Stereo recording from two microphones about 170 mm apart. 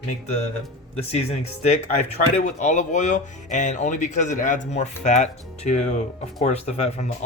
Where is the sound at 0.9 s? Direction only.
40° left (ahead or behind).